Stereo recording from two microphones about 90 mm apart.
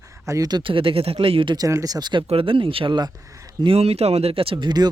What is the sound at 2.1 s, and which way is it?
Speech, 75° right (ahead or behind).